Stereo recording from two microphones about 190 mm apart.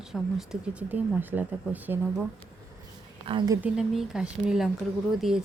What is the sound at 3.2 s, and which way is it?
Speech, 25° right (ahead or behind).